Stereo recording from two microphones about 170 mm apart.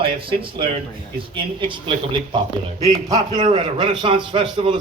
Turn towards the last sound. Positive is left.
turn(degrees=-30)  # may be behind; listen again after turning